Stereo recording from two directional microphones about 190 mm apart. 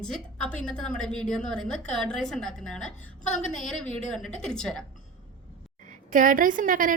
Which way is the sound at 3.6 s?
Centre (ahead or behind).